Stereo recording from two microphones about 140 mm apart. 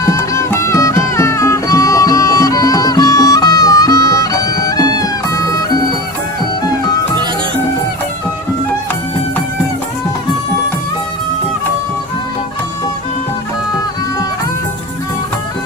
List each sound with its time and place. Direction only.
0.0 s music: 20° left (ahead or behind)